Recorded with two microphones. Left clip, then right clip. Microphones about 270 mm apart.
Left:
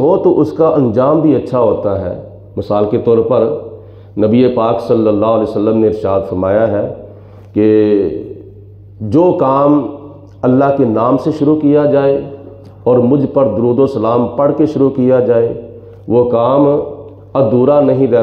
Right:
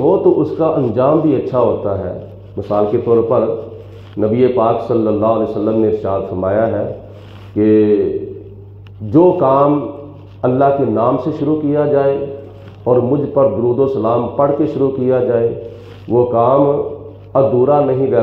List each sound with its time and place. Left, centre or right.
0.0 s a man's voice: left
9.1 s a man's voice: left